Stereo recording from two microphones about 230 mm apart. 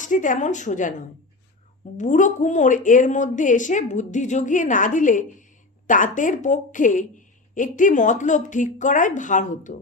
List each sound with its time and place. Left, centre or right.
0.0 s a woman's voice: left
2.0 s a woman's voice: left